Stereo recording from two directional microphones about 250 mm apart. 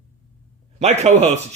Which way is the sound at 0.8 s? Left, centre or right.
Right.